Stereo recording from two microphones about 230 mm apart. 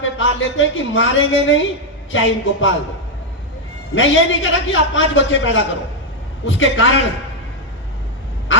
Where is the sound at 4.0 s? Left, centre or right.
Left.